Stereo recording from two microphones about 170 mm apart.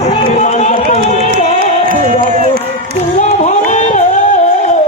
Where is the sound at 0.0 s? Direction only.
35° left (ahead or behind).